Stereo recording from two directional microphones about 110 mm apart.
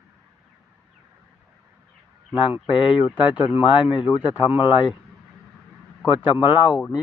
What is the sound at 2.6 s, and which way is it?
A man's voice, 50° left (ahead or behind).